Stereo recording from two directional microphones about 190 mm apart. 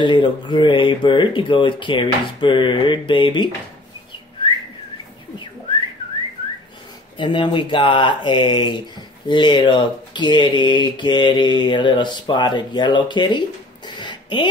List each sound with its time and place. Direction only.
0.0 s speech: 25° left (ahead or behind)
7.2 s speech: 25° left (ahead or behind)
13.8 s a sound: 25° left (ahead or behind)